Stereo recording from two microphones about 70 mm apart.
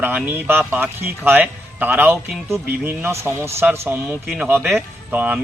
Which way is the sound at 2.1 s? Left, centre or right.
Right.